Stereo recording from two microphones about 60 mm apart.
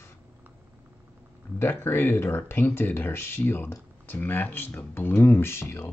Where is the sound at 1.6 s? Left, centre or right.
Left.